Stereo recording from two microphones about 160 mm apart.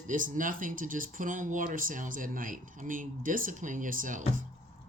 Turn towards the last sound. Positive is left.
turn(degrees=-55)  # may be behind; listen again after turning